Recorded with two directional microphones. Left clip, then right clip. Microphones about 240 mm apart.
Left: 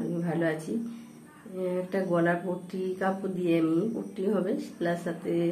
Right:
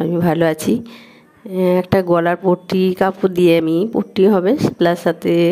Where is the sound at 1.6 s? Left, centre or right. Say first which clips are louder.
Right 15 dB; right.